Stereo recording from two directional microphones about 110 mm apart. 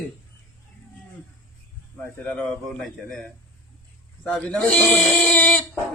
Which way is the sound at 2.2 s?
10° left (ahead or behind).